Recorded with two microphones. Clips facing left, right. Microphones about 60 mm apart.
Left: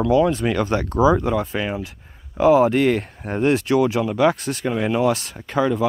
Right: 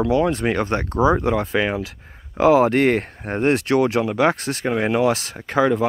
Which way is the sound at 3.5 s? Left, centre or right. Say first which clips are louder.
Right 1 dB; right.